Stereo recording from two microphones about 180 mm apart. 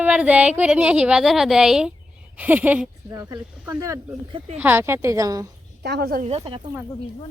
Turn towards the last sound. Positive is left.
turn(degrees=-30)  # may be behind; listen again after turning